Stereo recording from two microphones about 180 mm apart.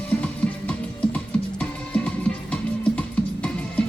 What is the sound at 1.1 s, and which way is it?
Music, 5° left (ahead or behind).